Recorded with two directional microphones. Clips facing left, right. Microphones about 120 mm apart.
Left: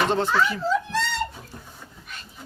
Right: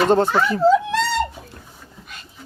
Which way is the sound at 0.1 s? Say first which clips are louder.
Right 5 dB; 45° right (ahead or behind).